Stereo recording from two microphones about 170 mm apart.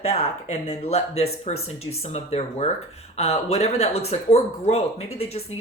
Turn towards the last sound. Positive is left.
turn(degrees=35)  # may be behind; listen again after turning